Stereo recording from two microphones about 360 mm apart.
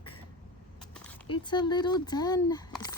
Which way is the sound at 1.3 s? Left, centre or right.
Centre.